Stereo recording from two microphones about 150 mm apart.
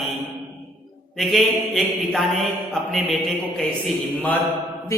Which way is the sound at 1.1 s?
Centre (ahead or behind).